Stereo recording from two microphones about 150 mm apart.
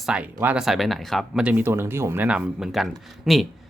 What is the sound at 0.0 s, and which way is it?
Speech, 5° right (ahead or behind).